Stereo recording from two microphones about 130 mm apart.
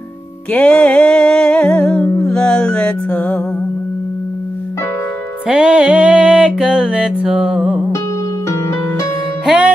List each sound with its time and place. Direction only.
0.5 s music: 10° left (ahead or behind)
5.5 s music: 5° right (ahead or behind)
8.5 s music: 20° left (ahead or behind)